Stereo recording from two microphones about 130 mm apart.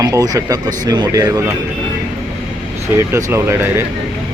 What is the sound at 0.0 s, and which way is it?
Speech, 25° right (ahead or behind).